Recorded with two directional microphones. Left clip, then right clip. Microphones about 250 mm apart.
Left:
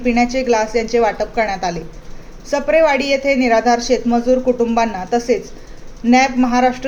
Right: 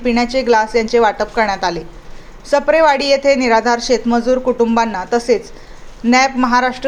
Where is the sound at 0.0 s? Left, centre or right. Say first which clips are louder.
Right 1 dB; centre.